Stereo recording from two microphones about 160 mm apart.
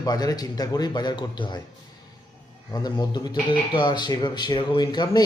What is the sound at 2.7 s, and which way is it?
Speech, 25° left (ahead or behind).